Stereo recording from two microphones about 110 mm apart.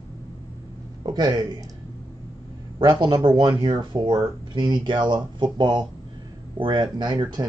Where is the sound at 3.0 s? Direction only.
40° right (ahead or behind).